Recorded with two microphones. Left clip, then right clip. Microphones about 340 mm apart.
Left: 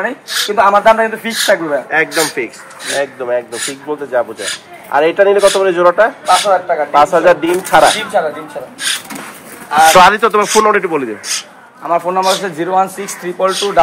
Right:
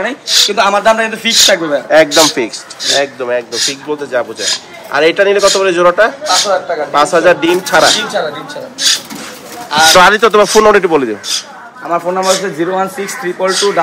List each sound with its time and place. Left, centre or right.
0.0 s a man's voice: centre
9.7 s a man's voice: centre
11.9 s speech: left